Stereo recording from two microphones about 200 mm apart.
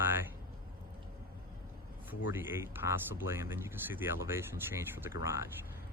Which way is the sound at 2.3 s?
10° right (ahead or behind).